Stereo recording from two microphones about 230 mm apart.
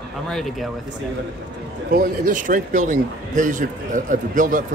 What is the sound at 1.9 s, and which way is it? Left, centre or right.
A man's voice, right.